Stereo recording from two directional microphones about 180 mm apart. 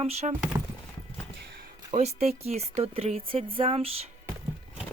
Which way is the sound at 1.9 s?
35° right (ahead or behind).